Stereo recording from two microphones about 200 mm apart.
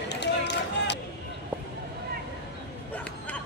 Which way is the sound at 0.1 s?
60° left (ahead or behind).